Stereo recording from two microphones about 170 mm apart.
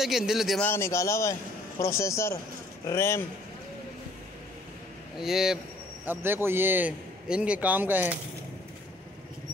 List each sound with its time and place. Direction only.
0.0 s a man's voice: centre (ahead or behind)
0.7 s a man's voice: 15° left (ahead or behind)
5.1 s a man's voice: centre (ahead or behind)
6.0 s a man's voice: 15° right (ahead or behind)